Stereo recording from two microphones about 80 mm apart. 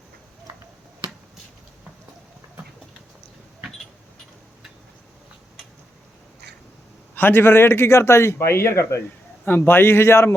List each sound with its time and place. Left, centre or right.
7.2 s a man's voice: left